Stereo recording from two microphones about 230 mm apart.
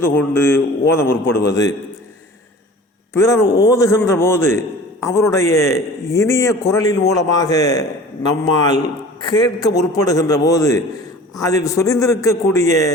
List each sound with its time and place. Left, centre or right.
0.0 s a man's voice: centre
3.1 s a man's voice: centre
3.4 s a man's voice: left
3.7 s a man's voice: centre